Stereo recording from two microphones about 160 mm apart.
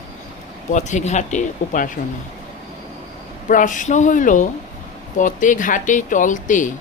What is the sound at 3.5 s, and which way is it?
A woman's voice, 55° left (ahead or behind).